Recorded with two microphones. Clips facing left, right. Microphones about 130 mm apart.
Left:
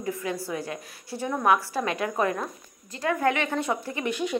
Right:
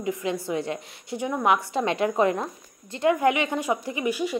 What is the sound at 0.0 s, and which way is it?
A woman's voice, 20° right (ahead or behind).